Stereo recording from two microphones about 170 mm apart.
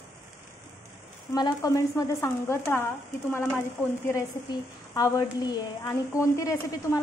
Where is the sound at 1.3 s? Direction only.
20° left (ahead or behind).